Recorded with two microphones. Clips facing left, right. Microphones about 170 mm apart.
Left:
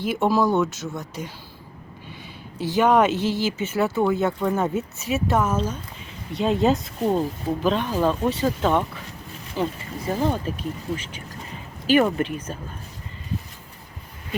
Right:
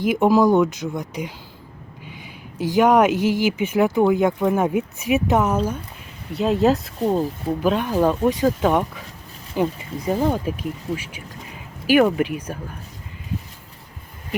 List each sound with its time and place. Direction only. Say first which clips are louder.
0.0 s speech: right 5 dB; 10° right (ahead or behind)
2.6 s speech: right 3 dB; 10° right (ahead or behind)
6.3 s speech: right 2 dB; centre (ahead or behind)